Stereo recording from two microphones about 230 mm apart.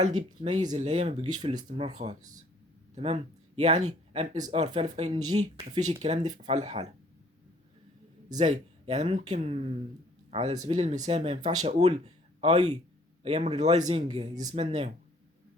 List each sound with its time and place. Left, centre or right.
0.7 s speech: right
8.4 s speech: right